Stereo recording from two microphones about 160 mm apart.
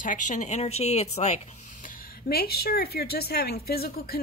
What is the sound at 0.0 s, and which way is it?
A woman's voice, 55° left (ahead or behind).